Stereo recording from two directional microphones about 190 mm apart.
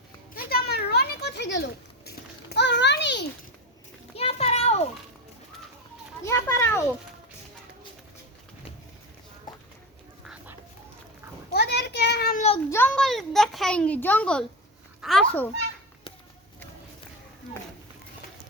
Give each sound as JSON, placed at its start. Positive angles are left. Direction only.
{"t": 0.3, "sound": "a sound", "side_deg": 55}
{"t": 4.1, "sound": "children playing", "side_deg": 30}
{"t": 6.2, "sound": "a child's voice", "side_deg": 15}
{"t": 10.2, "sound": "duck", "side_deg": -10}
{"t": 11.5, "sound": "a sound", "side_deg": 60}
{"t": 12.7, "sound": "a child's voice", "side_deg": 10}